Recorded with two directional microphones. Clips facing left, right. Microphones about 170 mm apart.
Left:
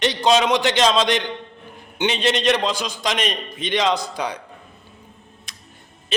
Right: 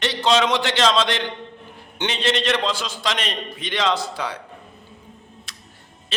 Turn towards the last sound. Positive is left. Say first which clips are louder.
# right 1 dB
turn(degrees=15)  # may be behind; listen again after turning